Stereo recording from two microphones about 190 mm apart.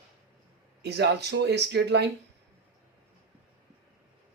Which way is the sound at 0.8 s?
65° right (ahead or behind).